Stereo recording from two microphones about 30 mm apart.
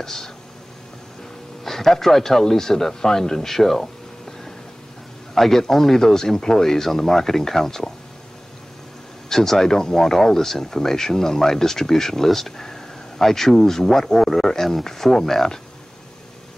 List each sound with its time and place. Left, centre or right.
0.0 s speech: centre
1.6 s speech: centre
5.3 s speech: centre
9.3 s speech: centre